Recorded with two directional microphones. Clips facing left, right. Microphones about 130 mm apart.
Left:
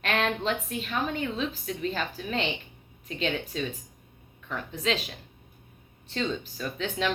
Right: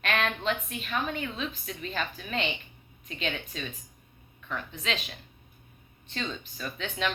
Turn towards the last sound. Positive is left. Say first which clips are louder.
# left 3 dB
turn(degrees=30)  # may be behind; listen again after turning